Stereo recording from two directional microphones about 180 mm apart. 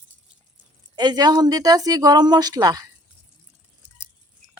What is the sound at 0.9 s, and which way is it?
Speech, 25° right (ahead or behind).